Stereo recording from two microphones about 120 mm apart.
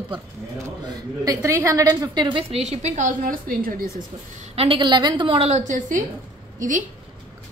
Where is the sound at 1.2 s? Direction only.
25° right (ahead or behind); by 2.4 s 40° right (ahead or behind).